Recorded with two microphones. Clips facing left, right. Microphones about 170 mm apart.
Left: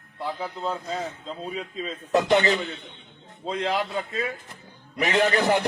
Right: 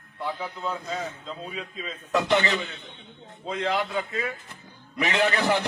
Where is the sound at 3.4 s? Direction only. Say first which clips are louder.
Left 1 dB; 30° left (ahead or behind).